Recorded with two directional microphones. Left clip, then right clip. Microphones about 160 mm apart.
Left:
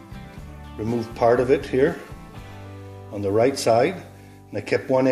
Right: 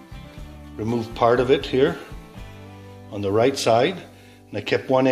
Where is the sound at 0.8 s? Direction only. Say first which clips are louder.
Right 1 dB; 5° right (ahead or behind).